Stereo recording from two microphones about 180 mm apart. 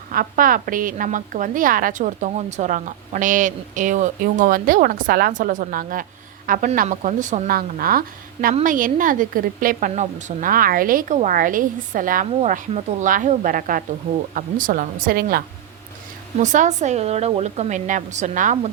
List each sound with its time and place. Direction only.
0.1 s a woman's voice: 50° right (ahead or behind)
16.4 s speech: 45° right (ahead or behind)